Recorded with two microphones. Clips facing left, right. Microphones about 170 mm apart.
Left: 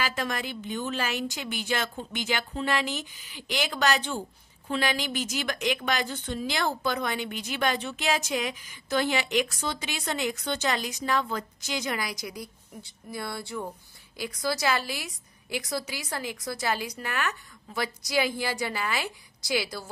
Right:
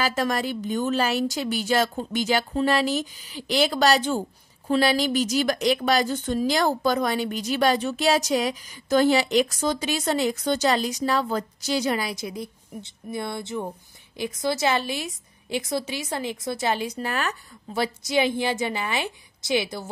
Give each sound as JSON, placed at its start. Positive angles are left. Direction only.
{"t": 0.0, "sound": "a woman's voice", "side_deg": -40}